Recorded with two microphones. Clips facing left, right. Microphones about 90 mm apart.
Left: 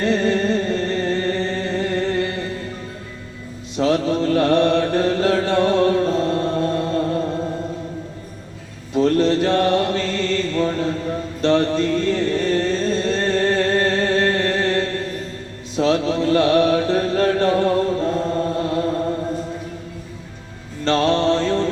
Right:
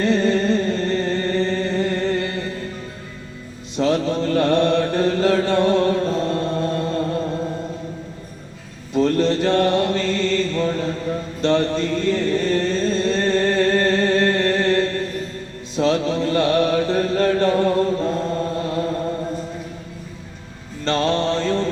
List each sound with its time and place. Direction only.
0.0 s music: 10° left (ahead or behind)
1.8 s a sound: 15° left (ahead or behind)
3.8 s mantra: 10° left (ahead or behind)
6.8 s music: 5° left (ahead or behind)
8.9 s mantra: 15° left (ahead or behind)
10.3 s chant: 15° left (ahead or behind)
11.4 s music: 15° left (ahead or behind)
15.8 s mantra: 10° left (ahead or behind)
18.7 s chant: 5° left (ahead or behind)
21.1 s mantra: 15° left (ahead or behind)